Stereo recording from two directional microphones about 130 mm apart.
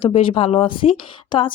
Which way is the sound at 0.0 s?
45° left (ahead or behind).